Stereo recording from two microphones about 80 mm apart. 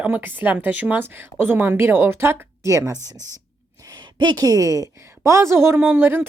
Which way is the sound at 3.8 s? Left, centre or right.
Right.